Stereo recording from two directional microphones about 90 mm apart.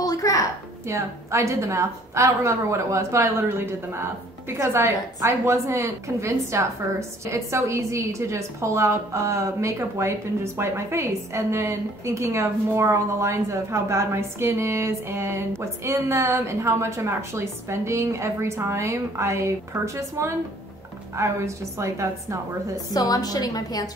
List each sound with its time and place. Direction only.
0.0 s a sound: 40° left (ahead or behind)
0.8 s a woman's voice: 35° right (ahead or behind)
22.9 s a woman's voice: 45° left (ahead or behind)